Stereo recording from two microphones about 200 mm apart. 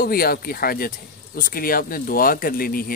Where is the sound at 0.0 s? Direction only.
50° left (ahead or behind).